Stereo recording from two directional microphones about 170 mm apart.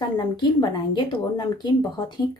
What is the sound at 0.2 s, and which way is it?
Speech, 25° left (ahead or behind).